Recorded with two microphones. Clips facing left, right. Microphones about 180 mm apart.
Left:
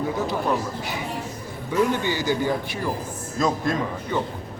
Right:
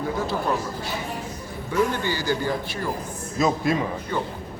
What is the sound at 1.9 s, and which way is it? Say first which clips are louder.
Speech: left 2 dB; 20° left (ahead or behind).